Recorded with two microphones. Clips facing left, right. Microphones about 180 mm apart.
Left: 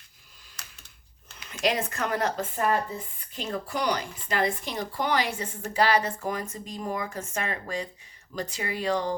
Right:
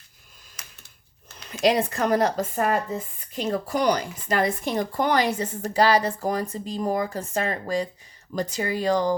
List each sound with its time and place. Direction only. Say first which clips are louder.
1.6 s speech: right 6 dB; 35° right (ahead or behind)